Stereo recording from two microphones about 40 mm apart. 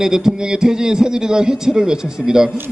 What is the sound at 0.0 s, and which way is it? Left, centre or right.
A man's voice, centre.